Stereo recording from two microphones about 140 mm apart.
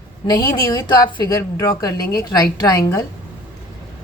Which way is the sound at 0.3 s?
30° left (ahead or behind).